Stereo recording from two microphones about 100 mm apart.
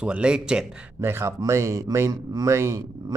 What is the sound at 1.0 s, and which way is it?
Speech, 25° right (ahead or behind).